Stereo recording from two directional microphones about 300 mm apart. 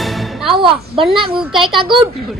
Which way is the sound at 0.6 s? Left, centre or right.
Centre.